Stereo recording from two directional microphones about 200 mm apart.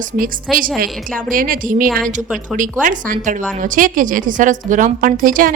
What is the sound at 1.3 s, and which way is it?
A woman's voice, 45° right (ahead or behind).